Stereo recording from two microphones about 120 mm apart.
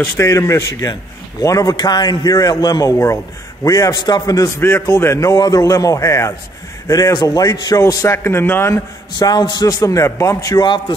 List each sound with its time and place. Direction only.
0.2 s a man's voice: 25° left (ahead or behind)
4.6 s a man's voice: 20° left (ahead or behind)
9.2 s a man's voice: 35° left (ahead or behind)